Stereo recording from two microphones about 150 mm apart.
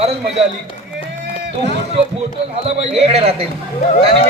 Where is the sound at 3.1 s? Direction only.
45° right (ahead or behind).